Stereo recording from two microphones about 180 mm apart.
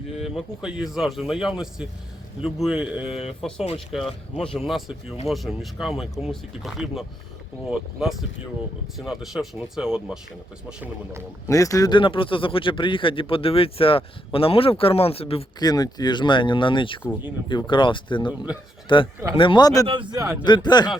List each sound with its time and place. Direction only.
0.3 s speech: 5° right (ahead or behind)
3.1 s speech: 35° left (ahead or behind)
4.4 s speech: centre (ahead or behind)
11.4 s speech: 15° left (ahead or behind)
19.9 s speech: 25° right (ahead or behind)
20.4 s speech: 25° left (ahead or behind)